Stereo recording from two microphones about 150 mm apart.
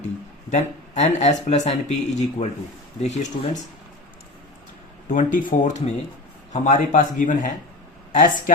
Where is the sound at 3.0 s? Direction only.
50° left (ahead or behind).